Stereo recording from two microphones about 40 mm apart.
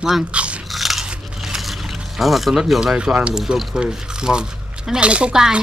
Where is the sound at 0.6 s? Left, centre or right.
Centre.